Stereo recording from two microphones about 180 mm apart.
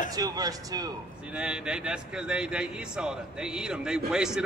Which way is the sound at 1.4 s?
5° right (ahead or behind).